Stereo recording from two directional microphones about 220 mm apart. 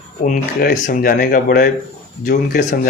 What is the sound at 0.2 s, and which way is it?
Speech, 35° left (ahead or behind).